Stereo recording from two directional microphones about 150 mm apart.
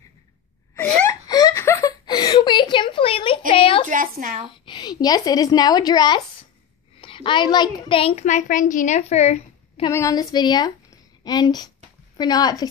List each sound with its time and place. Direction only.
0.7 s wail: 10° left (ahead or behind)
1.2 s a sound: 25° left (ahead or behind)
3.9 s speech: 60° right (ahead or behind)
4.5 s a woman's voice: 30° left (ahead or behind)
8.3 s a woman's voice: 60° left (ahead or behind)
9.8 s a woman's voice: 25° left (ahead or behind)